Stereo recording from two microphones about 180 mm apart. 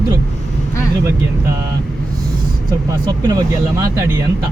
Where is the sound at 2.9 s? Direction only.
20° right (ahead or behind).